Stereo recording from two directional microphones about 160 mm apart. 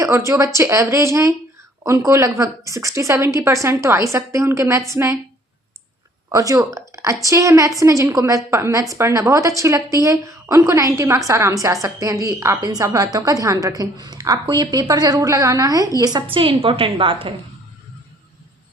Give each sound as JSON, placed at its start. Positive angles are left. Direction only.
{"t": 0.0, "sound": "a woman's voice", "side_deg": -20}
{"t": 6.3, "sound": "a woman's voice", "side_deg": -20}